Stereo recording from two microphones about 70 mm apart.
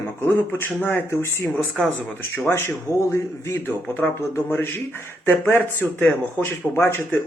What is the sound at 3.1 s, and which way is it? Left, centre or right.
Speech, left.